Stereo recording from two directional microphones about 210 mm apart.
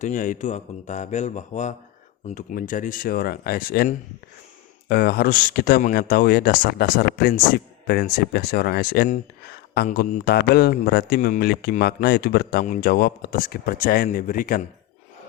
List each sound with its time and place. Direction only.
0.0 s a man's voice: 35° left (ahead or behind)